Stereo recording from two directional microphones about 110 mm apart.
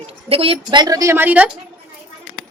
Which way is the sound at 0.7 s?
40° right (ahead or behind).